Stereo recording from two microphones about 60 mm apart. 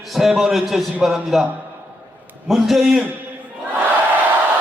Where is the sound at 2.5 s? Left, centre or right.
Centre.